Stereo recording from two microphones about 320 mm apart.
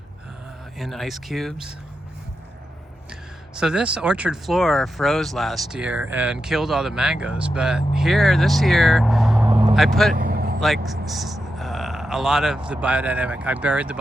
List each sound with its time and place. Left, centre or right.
0.8 s speech: centre
3.6 s speech: centre
9.5 s vehicle: centre
9.7 s speech: centre
10.2 s vehicle: right
10.6 s speech: centre